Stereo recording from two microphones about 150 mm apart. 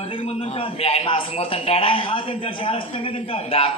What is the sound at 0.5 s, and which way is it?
A man's voice, 40° left (ahead or behind).